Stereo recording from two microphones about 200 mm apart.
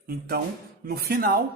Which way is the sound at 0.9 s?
50° right (ahead or behind).